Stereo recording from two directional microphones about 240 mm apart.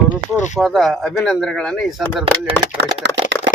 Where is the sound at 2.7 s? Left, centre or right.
Right.